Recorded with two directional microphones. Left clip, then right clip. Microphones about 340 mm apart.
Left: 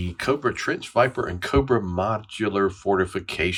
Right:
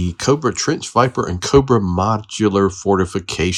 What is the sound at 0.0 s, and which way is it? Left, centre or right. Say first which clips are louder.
Speech: right 6 dB; centre.